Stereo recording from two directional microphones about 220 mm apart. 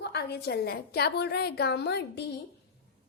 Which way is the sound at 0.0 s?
50° left (ahead or behind).